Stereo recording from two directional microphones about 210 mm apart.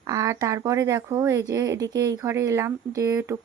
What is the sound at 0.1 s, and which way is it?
Speech, 15° right (ahead or behind).